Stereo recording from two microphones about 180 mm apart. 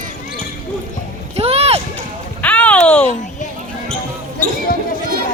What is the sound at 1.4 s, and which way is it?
Splash, 35° right (ahead or behind).